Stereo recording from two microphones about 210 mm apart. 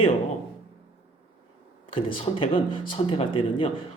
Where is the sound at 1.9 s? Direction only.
25° left (ahead or behind).